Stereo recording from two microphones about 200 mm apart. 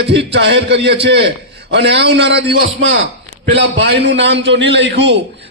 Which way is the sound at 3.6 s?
60° right (ahead or behind).